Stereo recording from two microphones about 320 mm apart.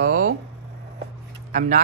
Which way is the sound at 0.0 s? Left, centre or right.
Right.